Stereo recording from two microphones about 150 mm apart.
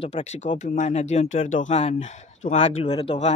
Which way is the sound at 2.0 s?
55° left (ahead or behind).